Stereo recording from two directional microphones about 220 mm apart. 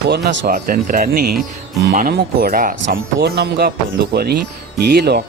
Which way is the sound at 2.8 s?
50° right (ahead or behind).